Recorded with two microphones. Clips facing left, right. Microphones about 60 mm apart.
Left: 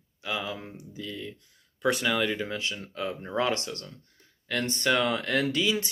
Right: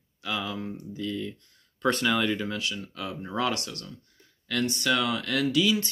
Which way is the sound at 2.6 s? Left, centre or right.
Left.